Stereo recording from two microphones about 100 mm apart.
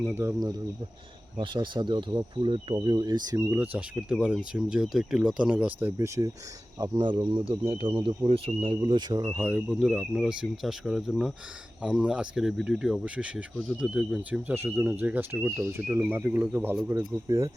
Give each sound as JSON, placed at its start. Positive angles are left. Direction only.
{"t": 0.1, "sound": "speech", "side_deg": -25}
{"t": 1.4, "sound": "speech", "side_deg": -55}
{"t": 3.6, "sound": "speech", "side_deg": -15}
{"t": 6.0, "sound": "speech", "side_deg": -30}
{"t": 6.7, "sound": "speech", "side_deg": -45}
{"t": 9.2, "sound": "speech", "side_deg": -20}
{"t": 15.4, "sound": "speech", "side_deg": -30}
{"t": 17.2, "sound": "speech", "side_deg": -30}